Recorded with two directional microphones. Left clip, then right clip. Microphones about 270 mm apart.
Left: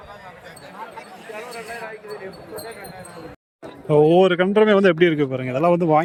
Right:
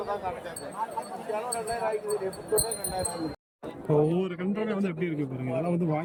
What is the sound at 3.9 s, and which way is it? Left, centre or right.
Speech, centre.